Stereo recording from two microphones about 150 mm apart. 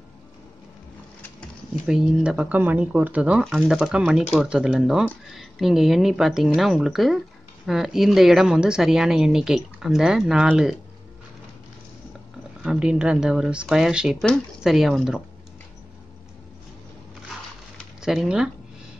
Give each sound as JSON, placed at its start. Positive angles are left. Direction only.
{"t": 1.9, "sound": "a woman's voice", "side_deg": -5}
{"t": 12.6, "sound": "a woman's voice", "side_deg": -5}
{"t": 18.0, "sound": "a woman's voice", "side_deg": -5}